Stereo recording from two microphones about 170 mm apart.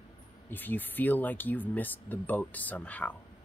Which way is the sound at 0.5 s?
10° left (ahead or behind).